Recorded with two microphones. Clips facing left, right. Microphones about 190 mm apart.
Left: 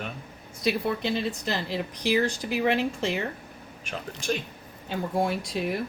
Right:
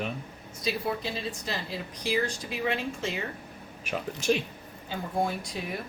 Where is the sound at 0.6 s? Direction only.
70° left (ahead or behind).